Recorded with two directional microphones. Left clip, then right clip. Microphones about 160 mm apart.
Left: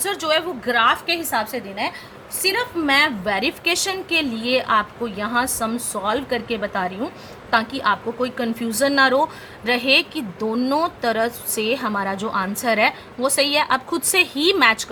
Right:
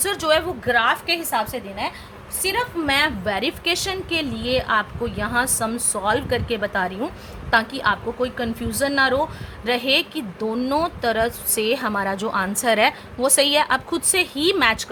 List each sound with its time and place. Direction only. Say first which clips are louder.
0.0 s speech: right 1 dB; 25° right (ahead or behind)
0.6 s a woman's voice: left 1 dB; 5° right (ahead or behind)